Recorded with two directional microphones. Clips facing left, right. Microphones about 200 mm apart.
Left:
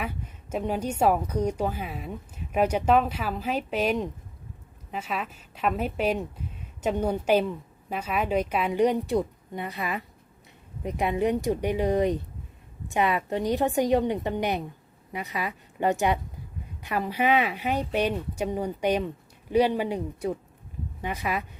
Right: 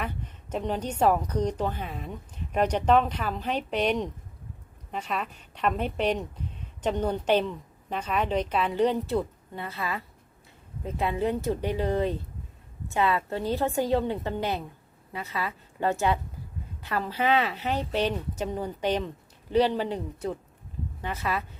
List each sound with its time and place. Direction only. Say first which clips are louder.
0.5 s a woman's voice: left 2 dB; 10° left (ahead or behind)